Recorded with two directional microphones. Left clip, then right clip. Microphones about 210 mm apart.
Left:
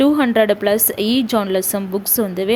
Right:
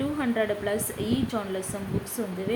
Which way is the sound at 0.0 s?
45° left (ahead or behind).